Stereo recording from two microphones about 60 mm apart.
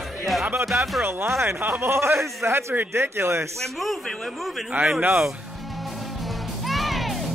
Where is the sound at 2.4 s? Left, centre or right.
Right.